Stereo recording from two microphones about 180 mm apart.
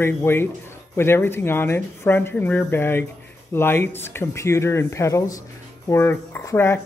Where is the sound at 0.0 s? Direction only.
15° left (ahead or behind).